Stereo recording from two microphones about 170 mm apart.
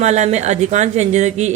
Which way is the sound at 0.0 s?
40° right (ahead or behind).